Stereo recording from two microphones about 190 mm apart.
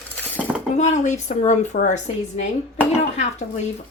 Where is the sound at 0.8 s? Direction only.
40° left (ahead or behind).